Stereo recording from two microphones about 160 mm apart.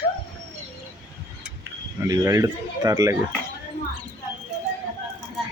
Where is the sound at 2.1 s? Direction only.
20° right (ahead or behind).